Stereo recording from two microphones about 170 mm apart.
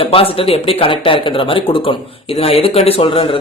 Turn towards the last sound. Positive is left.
turn(degrees=35)  # may be behind; listen again after turning